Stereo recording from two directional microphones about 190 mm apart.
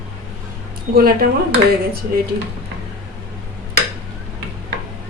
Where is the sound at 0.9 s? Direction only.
50° right (ahead or behind).